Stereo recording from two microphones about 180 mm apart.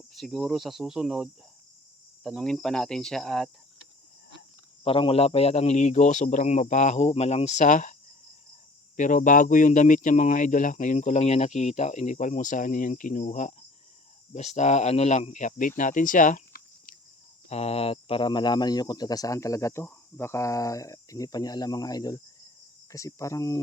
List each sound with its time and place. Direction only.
0.1 s cricket: centre (ahead or behind)
4.8 s speech: 30° left (ahead or behind)
9.0 s speech: 45° left (ahead or behind)
17.5 s speech: 35° left (ahead or behind); by 23.6 s 15° left (ahead or behind)